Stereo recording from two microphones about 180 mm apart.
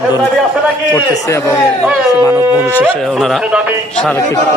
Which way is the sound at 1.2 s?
15° left (ahead or behind).